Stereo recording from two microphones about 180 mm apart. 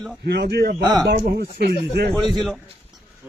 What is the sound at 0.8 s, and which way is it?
Speech, 20° right (ahead or behind).